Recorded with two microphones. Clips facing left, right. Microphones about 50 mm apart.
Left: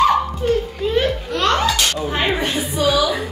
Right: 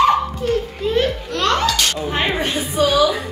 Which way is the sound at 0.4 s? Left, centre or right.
Centre.